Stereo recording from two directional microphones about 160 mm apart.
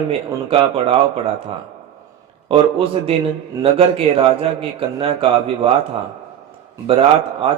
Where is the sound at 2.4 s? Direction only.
35° right (ahead or behind).